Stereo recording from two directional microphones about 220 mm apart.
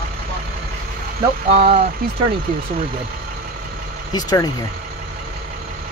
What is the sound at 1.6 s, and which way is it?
Speech, 45° right (ahead or behind).